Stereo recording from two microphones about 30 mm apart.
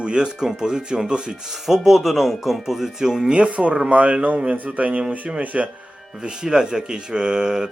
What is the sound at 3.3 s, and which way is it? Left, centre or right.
Speech, right.